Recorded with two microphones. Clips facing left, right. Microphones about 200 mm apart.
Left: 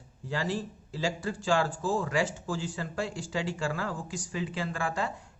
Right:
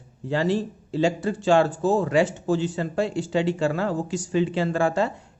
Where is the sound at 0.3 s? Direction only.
25° right (ahead or behind).